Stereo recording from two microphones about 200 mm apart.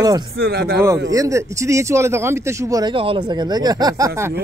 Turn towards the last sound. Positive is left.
turn(degrees=-20)  # may be behind; listen again after turning